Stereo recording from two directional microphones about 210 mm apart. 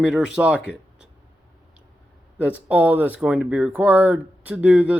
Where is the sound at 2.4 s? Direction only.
5° right (ahead or behind).